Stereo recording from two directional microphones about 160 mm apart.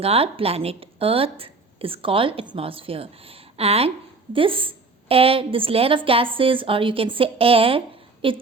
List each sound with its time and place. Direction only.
0.0 s a woman's voice: 35° right (ahead or behind)